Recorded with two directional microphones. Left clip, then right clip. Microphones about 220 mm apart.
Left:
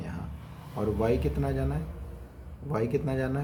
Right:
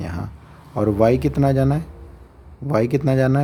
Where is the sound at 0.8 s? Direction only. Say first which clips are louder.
Right 11 dB; 50° right (ahead or behind).